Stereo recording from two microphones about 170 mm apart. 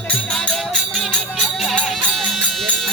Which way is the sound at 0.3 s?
Centre (ahead or behind).